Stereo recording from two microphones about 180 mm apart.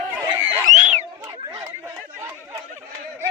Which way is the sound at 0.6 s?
40° right (ahead or behind).